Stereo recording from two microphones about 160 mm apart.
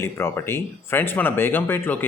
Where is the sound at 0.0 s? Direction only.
15° left (ahead or behind).